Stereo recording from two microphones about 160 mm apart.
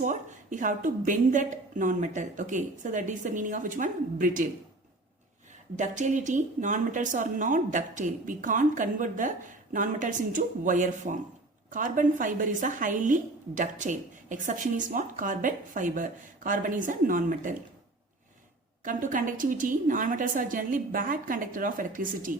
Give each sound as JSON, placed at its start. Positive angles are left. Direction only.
{"t": 0.0, "sound": "a woman's voice", "side_deg": -50}
{"t": 5.7, "sound": "a woman's voice", "side_deg": -50}
{"t": 18.9, "sound": "a woman's voice", "side_deg": -55}